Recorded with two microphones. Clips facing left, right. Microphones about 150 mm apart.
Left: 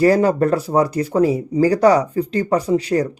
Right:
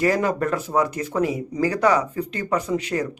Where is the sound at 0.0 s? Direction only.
35° left (ahead or behind).